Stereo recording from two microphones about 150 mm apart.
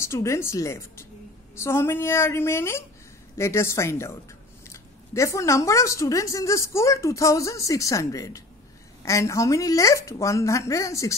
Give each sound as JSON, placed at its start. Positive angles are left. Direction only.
{"t": 0.0, "sound": "a woman's voice", "side_deg": 20}